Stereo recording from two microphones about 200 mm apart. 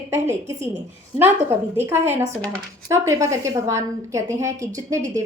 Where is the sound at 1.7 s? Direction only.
10° right (ahead or behind).